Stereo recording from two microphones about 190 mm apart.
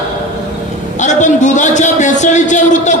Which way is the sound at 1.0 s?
40° left (ahead or behind).